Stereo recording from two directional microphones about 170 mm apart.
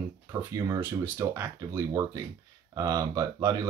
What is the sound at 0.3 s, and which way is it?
Speech, 20° right (ahead or behind).